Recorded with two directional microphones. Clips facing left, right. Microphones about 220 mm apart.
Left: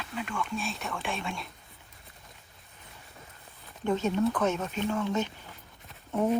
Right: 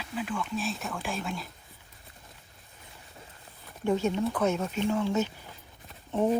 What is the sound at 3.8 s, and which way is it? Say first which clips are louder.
Speech: even; 10° right (ahead or behind).